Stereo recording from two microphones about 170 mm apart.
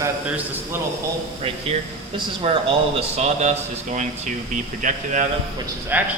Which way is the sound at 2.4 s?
35° right (ahead or behind).